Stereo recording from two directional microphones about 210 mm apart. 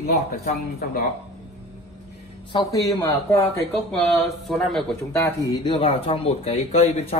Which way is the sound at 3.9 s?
Centre (ahead or behind).